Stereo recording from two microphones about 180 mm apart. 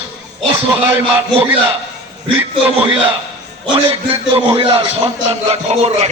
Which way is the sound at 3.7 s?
30° right (ahead or behind).